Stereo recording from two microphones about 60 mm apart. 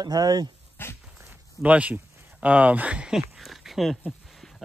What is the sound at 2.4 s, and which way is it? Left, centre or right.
Speech, right.